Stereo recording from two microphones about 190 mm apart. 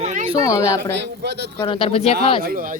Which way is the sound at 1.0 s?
60° right (ahead or behind).